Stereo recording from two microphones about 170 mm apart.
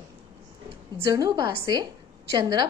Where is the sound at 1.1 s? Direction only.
20° right (ahead or behind).